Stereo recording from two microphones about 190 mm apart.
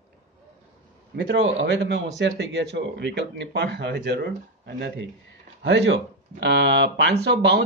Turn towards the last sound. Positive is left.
turn(degrees=-65)  # may be behind; listen again after turning